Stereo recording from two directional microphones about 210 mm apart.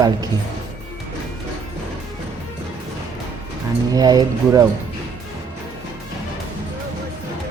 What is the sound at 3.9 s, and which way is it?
Speech, 20° right (ahead or behind).